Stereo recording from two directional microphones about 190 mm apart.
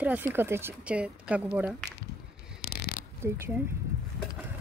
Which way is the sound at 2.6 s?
55° left (ahead or behind).